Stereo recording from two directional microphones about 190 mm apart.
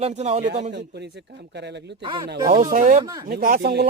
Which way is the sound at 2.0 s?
25° right (ahead or behind).